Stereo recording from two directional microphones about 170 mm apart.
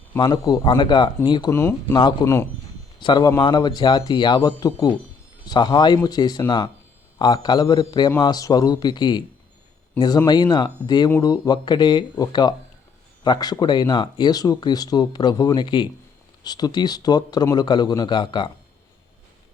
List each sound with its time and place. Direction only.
0.2 s speech: 25° left (ahead or behind)
1.5 s speech: 15° left (ahead or behind)
3.0 s speech: 25° left (ahead or behind)